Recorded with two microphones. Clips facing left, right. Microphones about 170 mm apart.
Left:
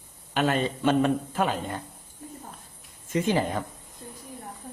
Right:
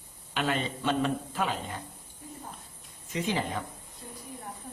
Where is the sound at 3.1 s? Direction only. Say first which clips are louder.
Left 6 dB; 50° left (ahead or behind).